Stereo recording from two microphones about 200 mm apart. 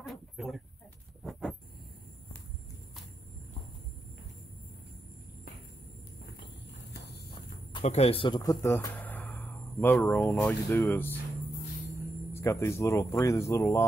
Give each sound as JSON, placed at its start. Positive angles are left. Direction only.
{"t": 0.0, "sound": "a sound", "side_deg": 0}
{"t": 6.9, "sound": "clip-clop", "side_deg": 50}
{"t": 7.7, "sound": "speech", "side_deg": 30}
{"t": 12.4, "sound": "speech", "side_deg": 15}